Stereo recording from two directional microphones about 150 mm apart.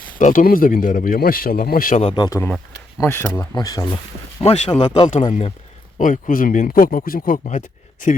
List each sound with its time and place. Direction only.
0.2 s speech: 60° left (ahead or behind)
2.1 s speech: 25° left (ahead or behind)
4.4 s speech: 50° left (ahead or behind)
4.7 s speech: 30° left (ahead or behind)
5.3 s speech: 45° left (ahead or behind)
6.0 s speech: 60° left (ahead or behind)